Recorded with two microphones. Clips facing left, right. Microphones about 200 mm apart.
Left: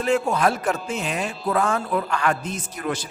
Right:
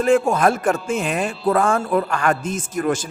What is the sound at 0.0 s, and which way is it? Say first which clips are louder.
Music: right 5 dB; 50° right (ahead or behind).